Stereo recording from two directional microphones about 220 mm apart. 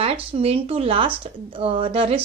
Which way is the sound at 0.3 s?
25° right (ahead or behind).